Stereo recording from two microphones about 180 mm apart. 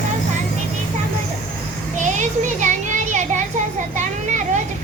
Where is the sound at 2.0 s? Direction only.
40° right (ahead or behind).